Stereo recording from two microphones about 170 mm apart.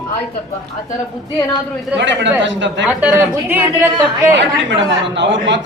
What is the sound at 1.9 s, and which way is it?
Speech, 90° right.